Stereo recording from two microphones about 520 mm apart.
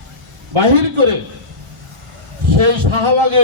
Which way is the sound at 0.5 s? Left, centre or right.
Right.